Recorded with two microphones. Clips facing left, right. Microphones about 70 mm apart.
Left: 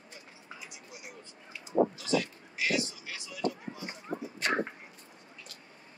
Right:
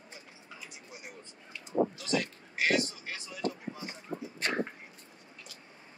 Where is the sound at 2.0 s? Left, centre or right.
Right.